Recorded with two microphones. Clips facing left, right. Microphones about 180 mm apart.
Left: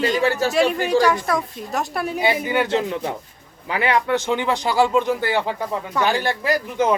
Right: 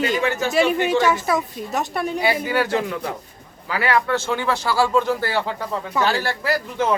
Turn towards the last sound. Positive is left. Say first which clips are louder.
# left 2 dB
turn(degrees=15)  # may be behind; listen again after turning